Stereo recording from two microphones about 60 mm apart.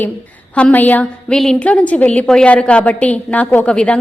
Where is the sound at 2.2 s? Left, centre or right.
Centre.